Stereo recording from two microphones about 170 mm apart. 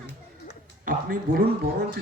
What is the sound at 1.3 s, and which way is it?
Speech, 55° right (ahead or behind).